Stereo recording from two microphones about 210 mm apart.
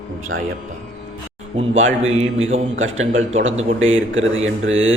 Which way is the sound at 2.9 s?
30° right (ahead or behind).